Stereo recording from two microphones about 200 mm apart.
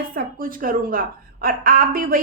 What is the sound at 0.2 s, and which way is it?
A woman's voice, 45° right (ahead or behind).